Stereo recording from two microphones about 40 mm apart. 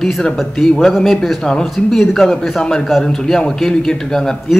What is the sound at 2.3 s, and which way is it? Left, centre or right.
A man's voice, centre.